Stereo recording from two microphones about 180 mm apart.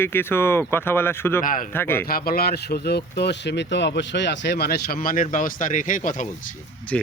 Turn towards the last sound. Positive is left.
turn(degrees=5)  # may be behind; listen again after turning